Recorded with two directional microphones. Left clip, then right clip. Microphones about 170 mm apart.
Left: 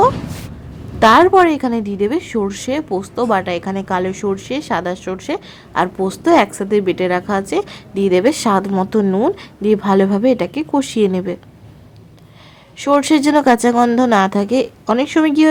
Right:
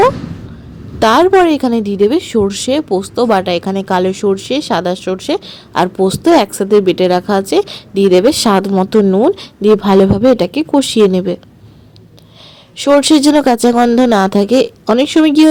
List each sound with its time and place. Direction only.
0.9 s a woman's voice: 30° right (ahead or behind)
12.8 s a woman's voice: 30° right (ahead or behind)
13.6 s speech: centre (ahead or behind)
14.1 s a woman's voice: 25° right (ahead or behind)